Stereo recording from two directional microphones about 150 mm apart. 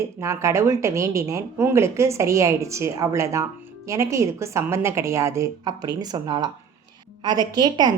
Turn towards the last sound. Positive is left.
turn(degrees=-30)  # may be behind; listen again after turning